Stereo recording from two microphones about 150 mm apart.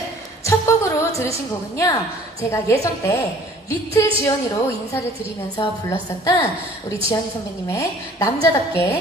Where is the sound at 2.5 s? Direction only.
20° left (ahead or behind).